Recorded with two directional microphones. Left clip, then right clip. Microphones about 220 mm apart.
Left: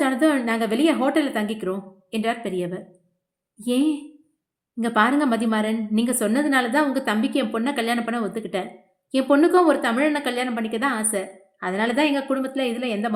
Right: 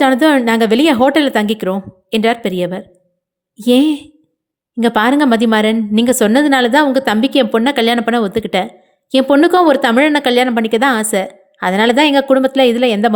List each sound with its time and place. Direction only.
0.0 s speech: 40° right (ahead or behind)